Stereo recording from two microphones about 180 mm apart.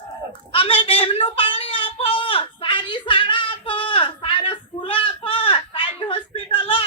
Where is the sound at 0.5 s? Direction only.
30° left (ahead or behind).